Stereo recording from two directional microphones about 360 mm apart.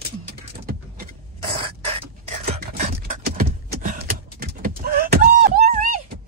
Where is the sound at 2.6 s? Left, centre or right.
Right.